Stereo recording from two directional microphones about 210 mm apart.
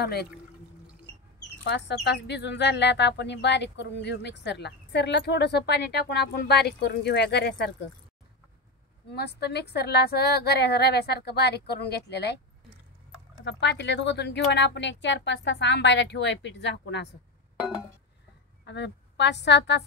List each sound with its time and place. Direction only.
0.0 s speech: 50° left (ahead or behind)
1.6 s speech: 55° left (ahead or behind)
9.1 s speech: 50° left (ahead or behind)
13.4 s speech: 55° left (ahead or behind)
18.7 s speech: 55° left (ahead or behind)